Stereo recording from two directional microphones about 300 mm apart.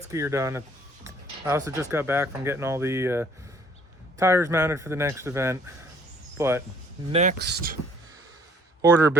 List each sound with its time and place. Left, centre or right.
0.1 s speech: centre
7.1 s speech: right
8.8 s speech: centre